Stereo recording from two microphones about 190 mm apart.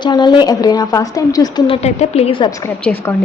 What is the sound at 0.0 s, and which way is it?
A woman's voice, 20° left (ahead or behind).